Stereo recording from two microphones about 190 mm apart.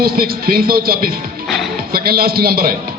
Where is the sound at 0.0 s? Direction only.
50° right (ahead or behind).